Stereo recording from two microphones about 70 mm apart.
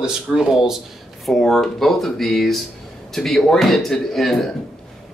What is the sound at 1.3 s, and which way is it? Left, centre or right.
A man's voice, centre.